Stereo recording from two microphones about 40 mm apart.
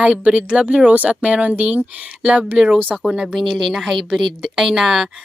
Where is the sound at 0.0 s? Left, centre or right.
Right.